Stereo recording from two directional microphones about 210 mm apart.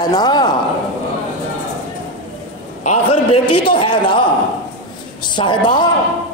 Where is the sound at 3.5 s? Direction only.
25° left (ahead or behind).